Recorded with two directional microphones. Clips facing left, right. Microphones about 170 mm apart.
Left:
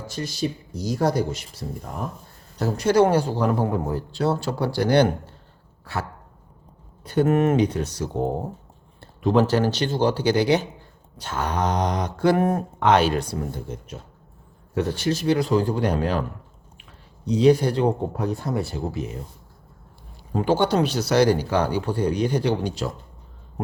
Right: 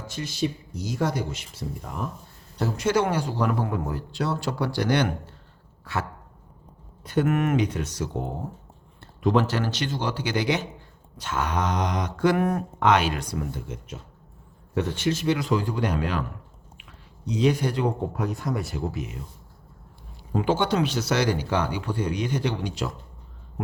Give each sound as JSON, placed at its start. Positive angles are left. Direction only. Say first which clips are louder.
{"t": 0.1, "sound": "speech", "louder": "even", "side_deg": 35}
{"t": 2.6, "sound": "speech", "louder": "left 5 dB", "side_deg": 35}
{"t": 7.0, "sound": "speech", "louder": "left 4 dB", "side_deg": 30}
{"t": 14.9, "sound": "speech", "louder": "left 3 dB", "side_deg": 35}
{"t": 17.2, "sound": "speech", "louder": "left 6 dB", "side_deg": 35}
{"t": 20.4, "sound": "speech", "louder": "left 3 dB", "side_deg": 35}